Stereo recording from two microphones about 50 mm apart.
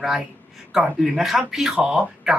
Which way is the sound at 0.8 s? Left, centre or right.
Centre.